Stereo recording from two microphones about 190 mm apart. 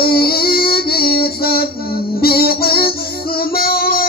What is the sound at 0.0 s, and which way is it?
Music, 55° left (ahead or behind).